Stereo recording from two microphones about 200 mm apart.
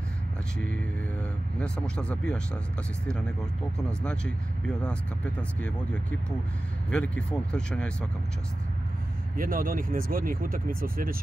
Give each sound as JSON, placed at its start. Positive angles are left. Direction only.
{"t": 1.6, "sound": "speech", "side_deg": 5}
{"t": 6.9, "sound": "speech", "side_deg": 5}
{"t": 9.4, "sound": "speech", "side_deg": -45}